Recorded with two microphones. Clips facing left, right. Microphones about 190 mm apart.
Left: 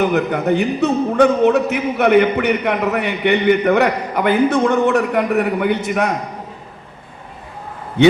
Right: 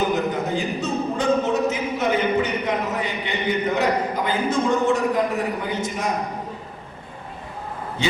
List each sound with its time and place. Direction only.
0.0 s a man's voice: 65° left (ahead or behind)
8.0 s a man's voice: 65° left (ahead or behind)